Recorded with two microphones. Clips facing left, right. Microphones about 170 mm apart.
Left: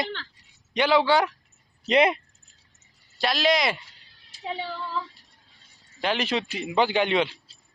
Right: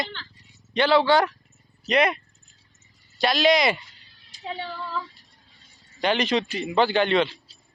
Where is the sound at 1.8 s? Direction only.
25° left (ahead or behind).